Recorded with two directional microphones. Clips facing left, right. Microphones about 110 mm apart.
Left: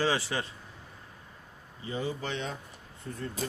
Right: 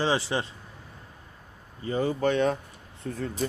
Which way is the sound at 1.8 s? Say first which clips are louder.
Right 8 dB; 50° right (ahead or behind).